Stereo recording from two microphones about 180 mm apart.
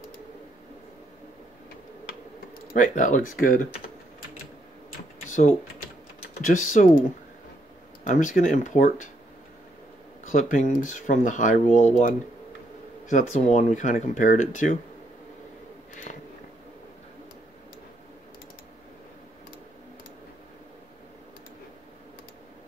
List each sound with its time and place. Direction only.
2.7 s speech: 45° left (ahead or behind)
5.3 s speech: 40° left (ahead or behind)
8.0 s speech: 45° left (ahead or behind)
10.2 s speech: 45° left (ahead or behind)
13.1 s speech: 40° left (ahead or behind)